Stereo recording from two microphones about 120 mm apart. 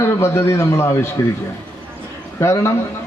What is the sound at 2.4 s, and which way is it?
Speech, 20° left (ahead or behind).